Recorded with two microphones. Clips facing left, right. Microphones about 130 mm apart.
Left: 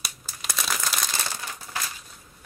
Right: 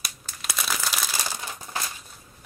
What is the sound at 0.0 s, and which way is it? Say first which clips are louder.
Crumpling: even; centre (ahead or behind).